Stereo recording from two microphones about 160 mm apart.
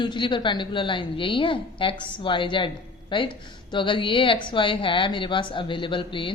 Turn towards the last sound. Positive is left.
turn(degrees=30)  # may be behind; listen again after turning